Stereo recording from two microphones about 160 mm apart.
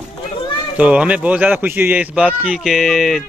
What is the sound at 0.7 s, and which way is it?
Speech, 10° right (ahead or behind).